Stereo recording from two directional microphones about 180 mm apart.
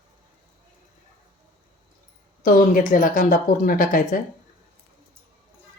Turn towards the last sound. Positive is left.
turn(degrees=50)  # may be behind; listen again after turning